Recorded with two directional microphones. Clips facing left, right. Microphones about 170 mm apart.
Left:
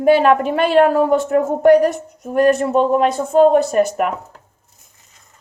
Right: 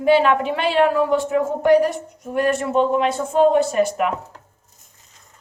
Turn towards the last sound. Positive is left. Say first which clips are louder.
# left 2 dB
turn(degrees=45)  # may be behind; listen again after turning